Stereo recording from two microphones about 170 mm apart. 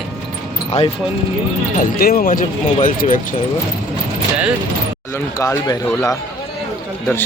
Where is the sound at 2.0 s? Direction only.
60° left (ahead or behind).